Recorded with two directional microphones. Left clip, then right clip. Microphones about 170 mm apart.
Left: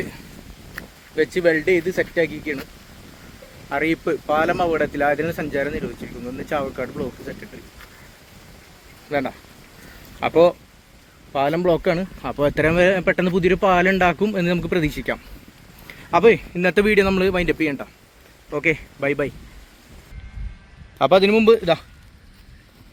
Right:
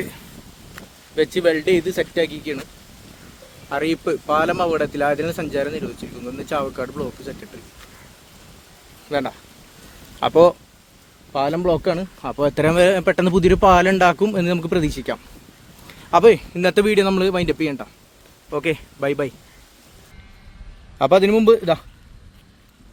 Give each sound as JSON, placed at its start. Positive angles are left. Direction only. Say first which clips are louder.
{"t": 1.1, "sound": "speech", "louder": "even", "side_deg": -5}
{"t": 3.7, "sound": "speech", "louder": "even", "side_deg": -15}
{"t": 9.0, "sound": "speech", "louder": "right 1 dB", "side_deg": -5}
{"t": 10.2, "sound": "speech", "louder": "right 2 dB", "side_deg": -20}
{"t": 11.3, "sound": "speech", "louder": "even", "side_deg": 0}
{"t": 12.6, "sound": "speech", "louder": "right 3 dB", "side_deg": -25}
{"t": 16.2, "sound": "speech", "louder": "right 1 dB", "side_deg": -20}
{"t": 16.8, "sound": "speech", "louder": "even", "side_deg": -5}
{"t": 18.5, "sound": "speech", "louder": "left 1 dB", "side_deg": -30}
{"t": 18.9, "sound": "speech", "louder": "even", "side_deg": -15}
{"t": 21.0, "sound": "speech", "louder": "even", "side_deg": -5}